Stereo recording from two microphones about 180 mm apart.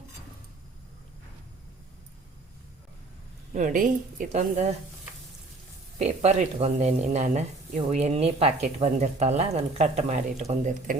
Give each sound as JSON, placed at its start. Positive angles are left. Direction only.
{"t": 3.5, "sound": "a woman's voice", "side_deg": -45}
{"t": 6.0, "sound": "speech", "side_deg": -40}